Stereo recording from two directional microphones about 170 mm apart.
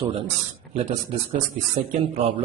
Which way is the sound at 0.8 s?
40° right (ahead or behind).